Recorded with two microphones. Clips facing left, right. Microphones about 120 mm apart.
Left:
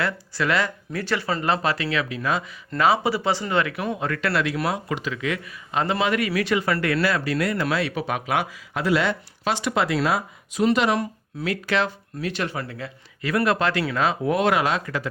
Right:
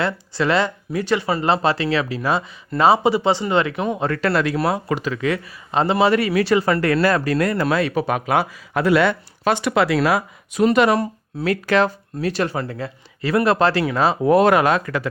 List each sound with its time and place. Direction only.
0.0 s speech: 25° right (ahead or behind)
1.4 s speech: 30° right (ahead or behind)
8.7 s speech: 60° right (ahead or behind)
10.6 s speech: 50° right (ahead or behind)